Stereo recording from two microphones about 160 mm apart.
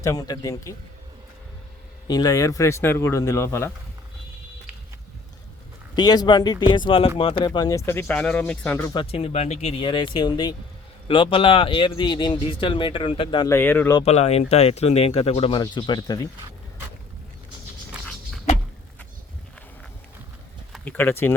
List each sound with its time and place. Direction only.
0.0 s speech: 20° left (ahead or behind)
2.0 s speech: 25° left (ahead or behind)
6.0 s speech: 25° left (ahead or behind); by 8.9 s 10° left (ahead or behind)
8.9 s speech: 35° left (ahead or behind)
13.5 s speech: 10° left (ahead or behind)
14.0 s speech: 40° left (ahead or behind); by 16.2 s 25° left (ahead or behind)
18.0 s a sound: 5° left (ahead or behind)
20.8 s speech: 10° left (ahead or behind)